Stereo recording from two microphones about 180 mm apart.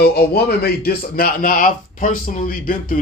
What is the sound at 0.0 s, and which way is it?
Speech, 60° left (ahead or behind).